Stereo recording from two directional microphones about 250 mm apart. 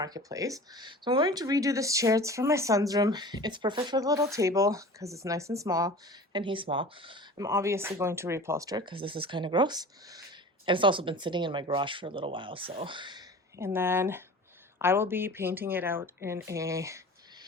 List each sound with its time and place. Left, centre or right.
0.0 s speech: centre